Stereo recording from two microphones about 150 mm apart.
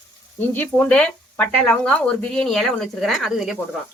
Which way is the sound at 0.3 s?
10° left (ahead or behind).